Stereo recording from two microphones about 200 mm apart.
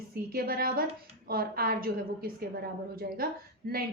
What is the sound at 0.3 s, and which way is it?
A woman's voice, 50° right (ahead or behind).